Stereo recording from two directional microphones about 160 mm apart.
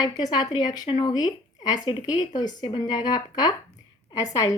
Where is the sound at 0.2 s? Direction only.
25° left (ahead or behind).